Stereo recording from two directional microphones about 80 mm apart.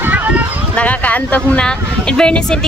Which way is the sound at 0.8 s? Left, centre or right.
Centre.